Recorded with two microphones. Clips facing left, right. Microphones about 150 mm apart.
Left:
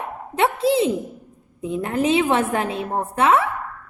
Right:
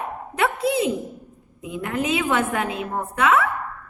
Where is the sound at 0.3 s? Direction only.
30° left (ahead or behind).